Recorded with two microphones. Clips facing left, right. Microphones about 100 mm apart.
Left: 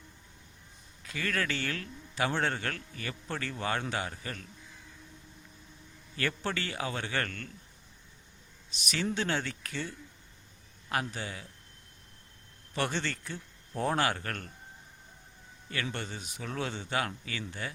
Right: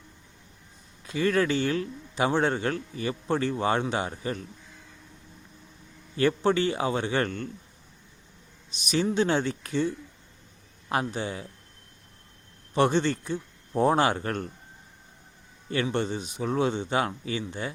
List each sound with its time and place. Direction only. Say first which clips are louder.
1.0 s a man's voice: right 9 dB; 25° right (ahead or behind)
6.1 s a man's voice: right 11 dB; 20° right (ahead or behind)
8.8 s a man's voice: right 8 dB; 20° right (ahead or behind)
12.7 s a man's voice: right 10 dB; 20° right (ahead or behind)
15.7 s a man's voice: right 10 dB; 25° right (ahead or behind)